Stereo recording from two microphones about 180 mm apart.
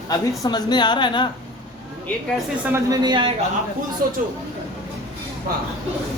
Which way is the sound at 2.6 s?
15° right (ahead or behind).